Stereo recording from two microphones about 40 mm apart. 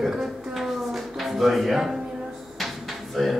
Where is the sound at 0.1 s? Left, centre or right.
Centre.